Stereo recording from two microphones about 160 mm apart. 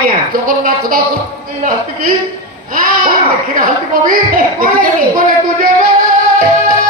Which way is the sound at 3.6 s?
60° right (ahead or behind).